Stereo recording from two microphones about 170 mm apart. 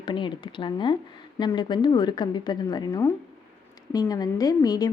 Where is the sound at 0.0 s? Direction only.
25° left (ahead or behind).